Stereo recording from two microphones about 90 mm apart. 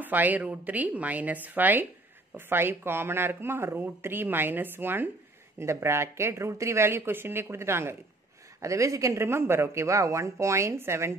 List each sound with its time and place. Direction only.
0.0 s speech: 20° right (ahead or behind)